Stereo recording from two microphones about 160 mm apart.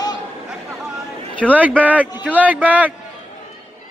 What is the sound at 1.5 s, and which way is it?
A man's voice, 10° right (ahead or behind).